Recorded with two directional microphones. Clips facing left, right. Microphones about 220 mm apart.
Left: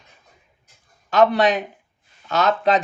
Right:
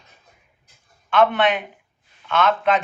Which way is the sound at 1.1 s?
40° left (ahead or behind).